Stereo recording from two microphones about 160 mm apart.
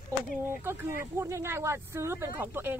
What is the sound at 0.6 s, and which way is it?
Speech, 15° right (ahead or behind).